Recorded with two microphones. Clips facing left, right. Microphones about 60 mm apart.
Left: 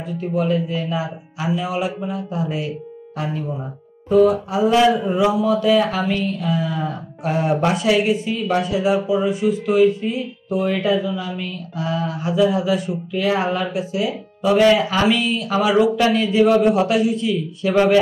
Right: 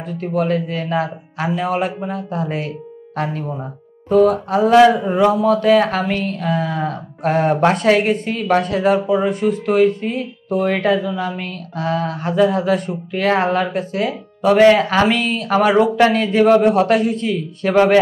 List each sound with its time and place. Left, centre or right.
0.0 s speech: right